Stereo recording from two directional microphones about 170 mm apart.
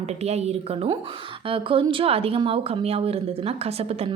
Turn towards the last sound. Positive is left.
turn(degrees=-35)  # may be behind; listen again after turning